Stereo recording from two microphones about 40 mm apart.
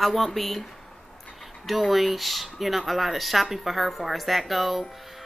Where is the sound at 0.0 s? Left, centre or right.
Centre.